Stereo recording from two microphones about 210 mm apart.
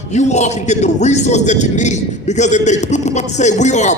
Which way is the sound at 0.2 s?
35° left (ahead or behind).